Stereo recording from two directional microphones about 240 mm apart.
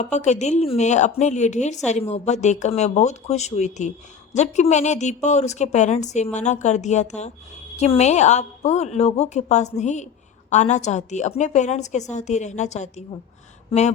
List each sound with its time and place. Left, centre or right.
0.0 s a woman's voice: left